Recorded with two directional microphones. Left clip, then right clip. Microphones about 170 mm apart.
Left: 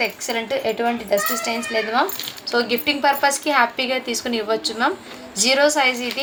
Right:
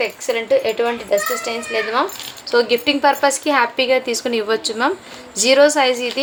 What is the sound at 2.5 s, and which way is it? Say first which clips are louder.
A woman's voice: right 5 dB; 30° right (ahead or behind).